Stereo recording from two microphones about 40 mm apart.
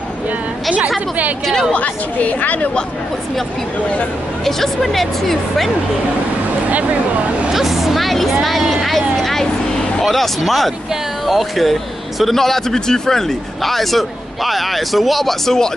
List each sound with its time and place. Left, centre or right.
1.4 s a woman's voice: centre
2.1 s a woman's voice: left
4.5 s a man's voice: centre
7.5 s a man's voice: centre